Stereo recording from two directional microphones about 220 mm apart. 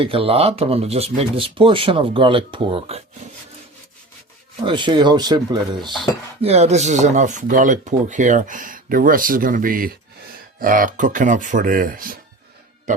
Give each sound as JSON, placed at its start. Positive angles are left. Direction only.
{"t": 0.0, "sound": "speech", "side_deg": -25}
{"t": 4.6, "sound": "dishes", "side_deg": -20}